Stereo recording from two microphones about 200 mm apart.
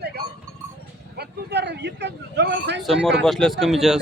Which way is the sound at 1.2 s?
60° right (ahead or behind).